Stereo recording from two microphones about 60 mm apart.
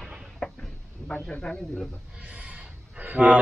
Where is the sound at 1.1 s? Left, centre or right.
Centre.